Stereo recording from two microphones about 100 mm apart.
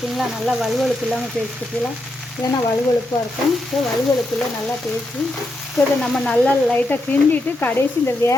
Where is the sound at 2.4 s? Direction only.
40° left (ahead or behind).